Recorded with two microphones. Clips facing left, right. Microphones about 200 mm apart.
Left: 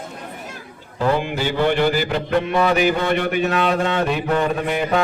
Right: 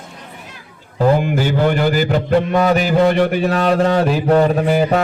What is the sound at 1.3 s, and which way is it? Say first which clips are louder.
Mantra: right 3 dB; 45° right (ahead or behind).